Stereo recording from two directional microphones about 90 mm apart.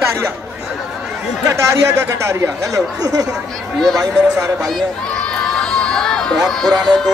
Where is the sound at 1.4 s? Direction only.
35° right (ahead or behind).